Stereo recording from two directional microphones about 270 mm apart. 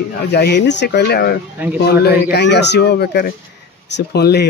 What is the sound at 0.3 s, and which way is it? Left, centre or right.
A man's voice, left.